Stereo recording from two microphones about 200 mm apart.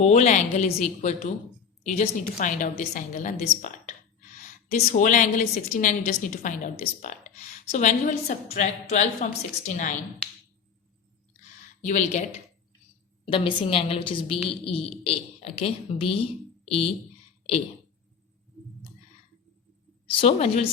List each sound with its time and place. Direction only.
0.0 s a woman's voice: 35° left (ahead or behind)
11.9 s a woman's voice: 35° left (ahead or behind)
20.1 s a woman's voice: 30° left (ahead or behind)